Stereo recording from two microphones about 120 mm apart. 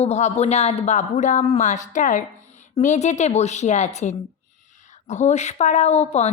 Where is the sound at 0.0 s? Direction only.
65° left (ahead or behind).